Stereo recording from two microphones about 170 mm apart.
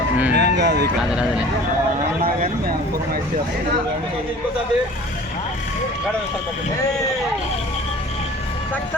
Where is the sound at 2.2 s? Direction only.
55° right (ahead or behind).